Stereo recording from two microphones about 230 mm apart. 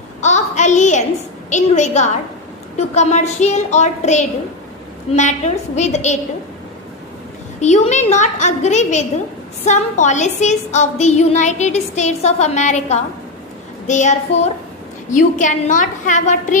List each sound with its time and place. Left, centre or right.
0.2 s a sound: left
1.5 s a woman's voice: left
7.6 s a woman's voice: left